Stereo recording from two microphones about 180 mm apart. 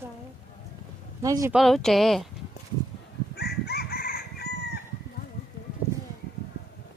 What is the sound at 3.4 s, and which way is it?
Chicken, 65° left (ahead or behind).